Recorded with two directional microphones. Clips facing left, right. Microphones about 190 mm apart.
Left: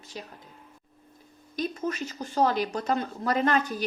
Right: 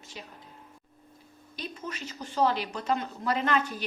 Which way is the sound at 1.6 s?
45° left (ahead or behind).